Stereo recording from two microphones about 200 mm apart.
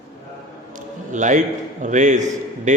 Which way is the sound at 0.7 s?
40° right (ahead or behind).